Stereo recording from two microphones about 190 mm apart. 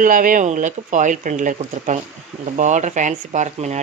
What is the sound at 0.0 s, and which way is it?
A man's voice, 45° right (ahead or behind).